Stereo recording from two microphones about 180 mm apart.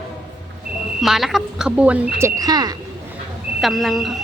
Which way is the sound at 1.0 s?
Centre (ahead or behind).